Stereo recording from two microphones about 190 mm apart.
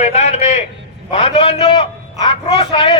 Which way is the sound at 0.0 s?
35° left (ahead or behind).